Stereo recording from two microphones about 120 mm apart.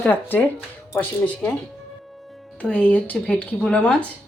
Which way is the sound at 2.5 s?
10° left (ahead or behind).